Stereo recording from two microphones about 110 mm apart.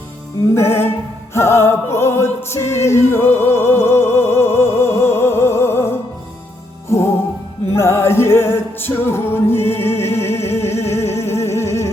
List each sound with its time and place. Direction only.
0.5 s music: 25° left (ahead or behind)
7.8 s music: 25° left (ahead or behind)